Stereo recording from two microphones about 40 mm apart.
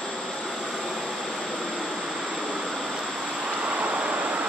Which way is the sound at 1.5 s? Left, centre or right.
Centre.